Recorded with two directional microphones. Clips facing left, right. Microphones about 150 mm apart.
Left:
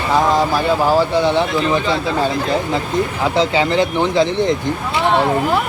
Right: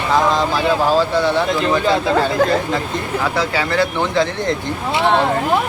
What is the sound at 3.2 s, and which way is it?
Speech, 20° left (ahead or behind).